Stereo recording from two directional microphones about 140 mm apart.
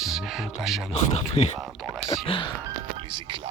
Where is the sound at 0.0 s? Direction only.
Centre (ahead or behind).